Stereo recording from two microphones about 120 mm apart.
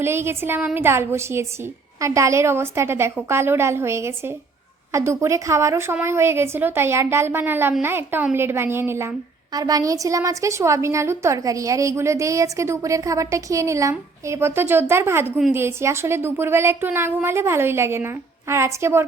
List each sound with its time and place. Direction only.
0.0 s a woman's voice: 20° right (ahead or behind)